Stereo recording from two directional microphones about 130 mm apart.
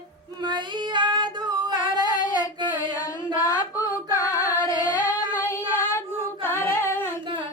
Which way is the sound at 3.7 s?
25° left (ahead or behind).